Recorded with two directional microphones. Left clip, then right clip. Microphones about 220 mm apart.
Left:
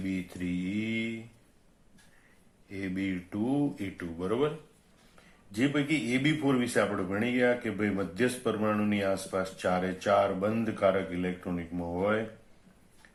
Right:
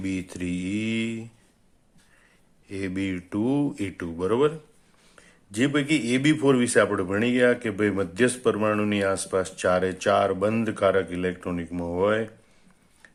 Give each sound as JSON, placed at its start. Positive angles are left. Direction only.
{"t": 0.0, "sound": "speech", "side_deg": -45}
{"t": 2.6, "sound": "speech", "side_deg": -45}